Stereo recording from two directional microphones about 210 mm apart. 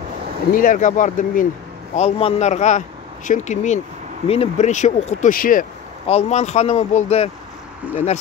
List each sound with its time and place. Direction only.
0.5 s speech: 40° left (ahead or behind)
6.0 s speech: 30° left (ahead or behind)